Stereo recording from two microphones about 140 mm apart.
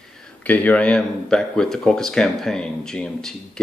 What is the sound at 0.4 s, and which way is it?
Speech, 10° left (ahead or behind).